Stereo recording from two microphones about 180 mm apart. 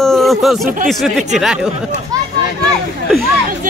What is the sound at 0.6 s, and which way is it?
Speech, 50° right (ahead or behind).